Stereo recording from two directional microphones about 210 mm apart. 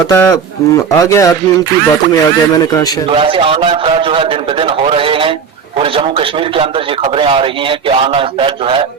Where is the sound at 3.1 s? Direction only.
25° right (ahead or behind).